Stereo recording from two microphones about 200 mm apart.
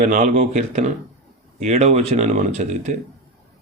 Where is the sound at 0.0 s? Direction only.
40° right (ahead or behind).